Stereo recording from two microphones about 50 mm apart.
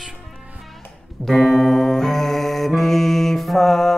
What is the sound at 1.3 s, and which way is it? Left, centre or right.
Music, centre.